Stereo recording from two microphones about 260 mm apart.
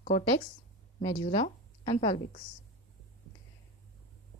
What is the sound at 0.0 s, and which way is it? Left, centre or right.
Speech, left.